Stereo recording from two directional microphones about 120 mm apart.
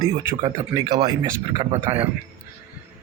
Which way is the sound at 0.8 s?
40° right (ahead or behind).